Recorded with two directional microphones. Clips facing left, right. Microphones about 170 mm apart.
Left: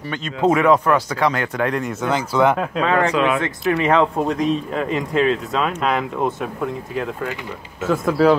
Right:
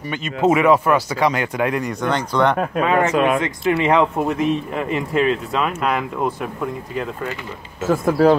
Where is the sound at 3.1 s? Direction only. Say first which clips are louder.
Right 1 dB; 50° right (ahead or behind).